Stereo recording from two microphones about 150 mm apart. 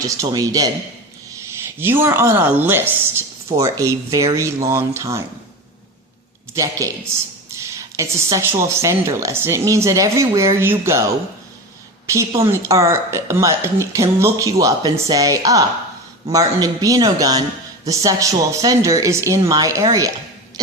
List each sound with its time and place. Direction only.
0.0 s a woman's voice: 25° right (ahead or behind)
1.5 s a woman's voice: 15° right (ahead or behind)
6.5 s a woman's voice: 20° right (ahead or behind)
12.0 s a woman's voice: 20° right (ahead or behind)